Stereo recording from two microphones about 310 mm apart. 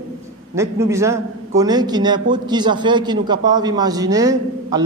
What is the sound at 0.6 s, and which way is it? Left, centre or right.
A man's voice, centre.